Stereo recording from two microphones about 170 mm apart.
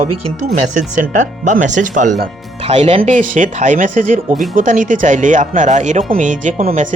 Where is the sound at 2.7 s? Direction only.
35° right (ahead or behind).